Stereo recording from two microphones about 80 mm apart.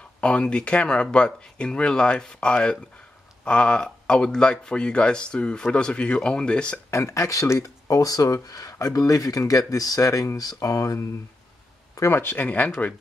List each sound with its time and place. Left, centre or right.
0.2 s speech: centre
6.9 s speech: left
12.1 s speech: left
12.4 s speech: centre